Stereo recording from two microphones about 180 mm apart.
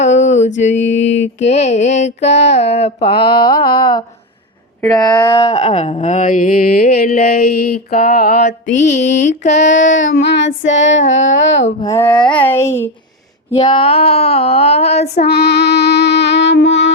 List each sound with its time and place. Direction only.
0.2 s mantra: 40° left (ahead or behind)
0.9 s child singing: 40° left (ahead or behind)
3.7 s a sound: 25° left (ahead or behind); by 9.9 s 45° left (ahead or behind)
9.9 s child singing: 75° left (ahead or behind)
11.8 s speech: 15° left (ahead or behind)
13.7 s child singing: 30° left (ahead or behind)
15.3 s music: 65° left (ahead or behind)